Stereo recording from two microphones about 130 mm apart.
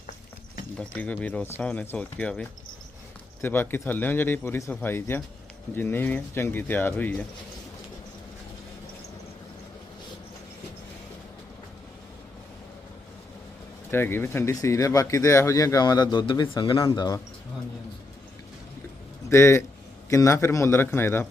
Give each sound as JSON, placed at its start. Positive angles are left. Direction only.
{"t": 0.8, "sound": "speech", "side_deg": 10}
{"t": 13.9, "sound": "speech", "side_deg": 15}
{"t": 19.3, "sound": "speech", "side_deg": 20}